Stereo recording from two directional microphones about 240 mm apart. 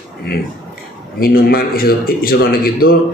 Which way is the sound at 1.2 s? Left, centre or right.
Left.